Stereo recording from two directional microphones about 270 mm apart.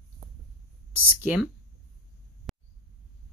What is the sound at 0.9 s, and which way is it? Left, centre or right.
Speech, centre.